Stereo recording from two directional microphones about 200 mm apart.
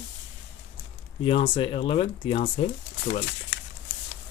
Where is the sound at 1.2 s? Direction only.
25° left (ahead or behind).